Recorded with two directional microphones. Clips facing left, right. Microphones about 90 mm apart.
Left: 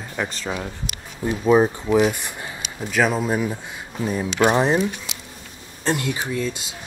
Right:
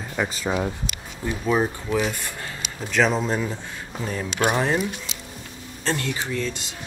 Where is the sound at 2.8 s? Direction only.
5° left (ahead or behind).